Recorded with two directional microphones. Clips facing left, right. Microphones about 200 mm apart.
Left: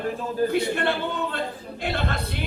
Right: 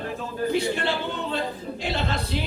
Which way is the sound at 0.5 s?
55° left (ahead or behind).